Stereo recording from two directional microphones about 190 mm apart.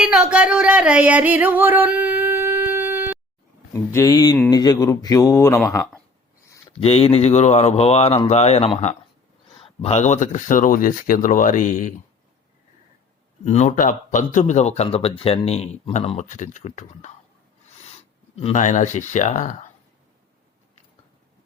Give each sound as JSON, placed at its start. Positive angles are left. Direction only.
{"t": 0.0, "sound": "singing", "side_deg": -5}
{"t": 3.7, "sound": "speech", "side_deg": 15}
{"t": 6.5, "sound": "speech", "side_deg": 25}
{"t": 13.4, "sound": "speech", "side_deg": 35}
{"t": 18.3, "sound": "speech", "side_deg": 35}